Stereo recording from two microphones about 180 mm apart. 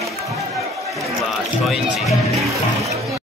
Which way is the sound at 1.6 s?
Centre (ahead or behind).